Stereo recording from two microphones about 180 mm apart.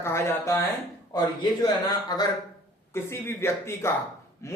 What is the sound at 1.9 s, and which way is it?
Speech, 20° left (ahead or behind).